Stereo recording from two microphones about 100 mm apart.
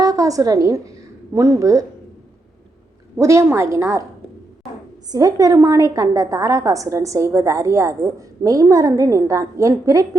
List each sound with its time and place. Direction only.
0.0 s a woman's voice: 35° right (ahead or behind)
3.2 s a woman's voice: 30° right (ahead or behind)
5.1 s a woman's voice: 40° right (ahead or behind)